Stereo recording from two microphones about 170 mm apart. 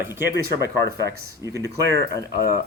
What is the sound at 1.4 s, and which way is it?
Speech, 20° right (ahead or behind).